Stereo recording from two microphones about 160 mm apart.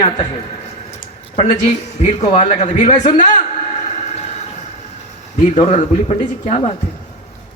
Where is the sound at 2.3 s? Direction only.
45° left (ahead or behind).